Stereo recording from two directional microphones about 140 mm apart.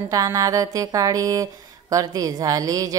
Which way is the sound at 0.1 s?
25° right (ahead or behind).